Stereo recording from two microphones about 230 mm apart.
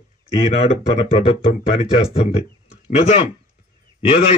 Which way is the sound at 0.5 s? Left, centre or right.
Left.